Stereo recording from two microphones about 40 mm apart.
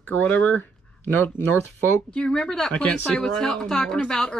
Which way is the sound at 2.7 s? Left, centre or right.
Left.